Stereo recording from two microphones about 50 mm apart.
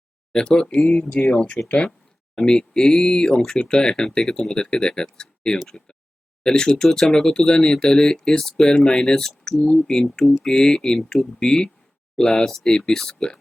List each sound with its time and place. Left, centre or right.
0.3 s speech: centre
10.5 s speech: centre